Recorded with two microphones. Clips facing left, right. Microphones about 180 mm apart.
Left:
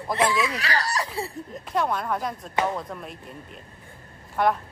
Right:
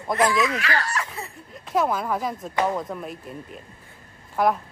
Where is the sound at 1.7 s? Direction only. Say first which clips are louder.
Right 3 dB; centre (ahead or behind).